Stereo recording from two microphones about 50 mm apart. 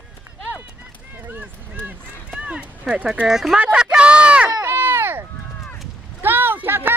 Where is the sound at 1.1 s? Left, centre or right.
Right.